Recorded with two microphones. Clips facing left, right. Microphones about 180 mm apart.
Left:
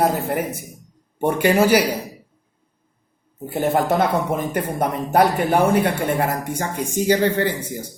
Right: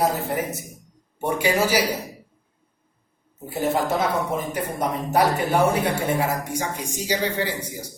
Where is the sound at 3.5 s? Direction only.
55° left (ahead or behind).